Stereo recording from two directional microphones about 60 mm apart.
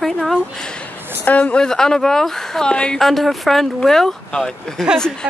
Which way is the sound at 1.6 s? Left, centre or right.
Centre.